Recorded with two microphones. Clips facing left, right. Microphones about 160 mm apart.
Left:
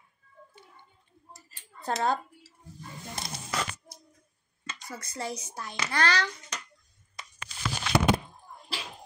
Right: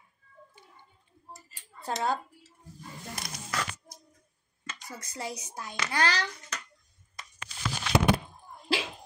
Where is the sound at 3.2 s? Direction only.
25° left (ahead or behind).